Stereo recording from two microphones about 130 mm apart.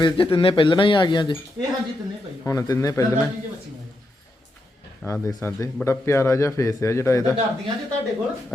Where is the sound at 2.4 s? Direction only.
25° left (ahead or behind).